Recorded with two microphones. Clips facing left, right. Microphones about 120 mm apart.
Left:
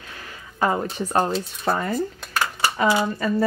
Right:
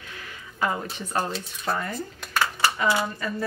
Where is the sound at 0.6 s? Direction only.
40° left (ahead or behind).